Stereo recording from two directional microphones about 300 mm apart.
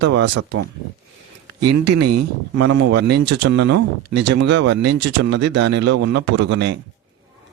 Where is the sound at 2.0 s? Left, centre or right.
Right.